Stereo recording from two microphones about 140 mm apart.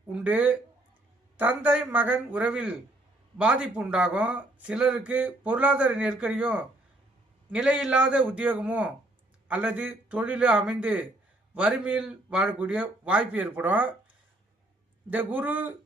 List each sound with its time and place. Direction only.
0.1 s speech: 10° right (ahead or behind)
15.1 s speech: 10° right (ahead or behind)